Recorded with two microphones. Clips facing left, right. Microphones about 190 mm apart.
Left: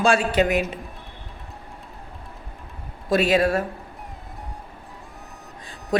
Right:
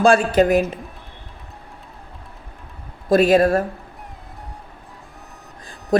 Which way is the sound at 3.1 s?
50° right (ahead or behind).